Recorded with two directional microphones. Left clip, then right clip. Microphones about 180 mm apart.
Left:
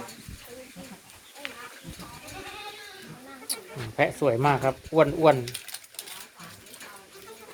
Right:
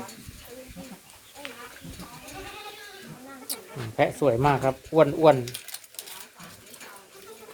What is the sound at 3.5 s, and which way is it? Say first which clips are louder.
Speech: left 1 dB; 5° right (ahead or behind).